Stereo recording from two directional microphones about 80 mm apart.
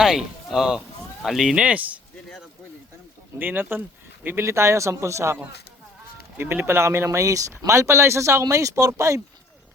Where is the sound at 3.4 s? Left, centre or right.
Right.